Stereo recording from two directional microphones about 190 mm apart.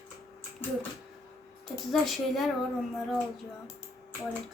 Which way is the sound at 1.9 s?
Centre (ahead or behind).